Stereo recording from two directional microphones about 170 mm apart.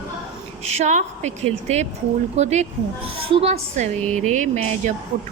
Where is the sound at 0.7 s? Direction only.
40° right (ahead or behind).